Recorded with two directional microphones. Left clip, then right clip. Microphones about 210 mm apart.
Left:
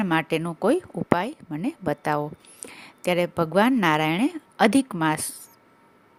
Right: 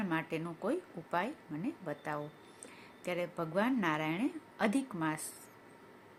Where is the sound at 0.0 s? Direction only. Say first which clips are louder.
Left 13 dB; 45° left (ahead or behind).